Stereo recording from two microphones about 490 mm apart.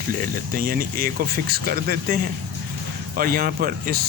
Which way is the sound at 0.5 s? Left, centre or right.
Centre.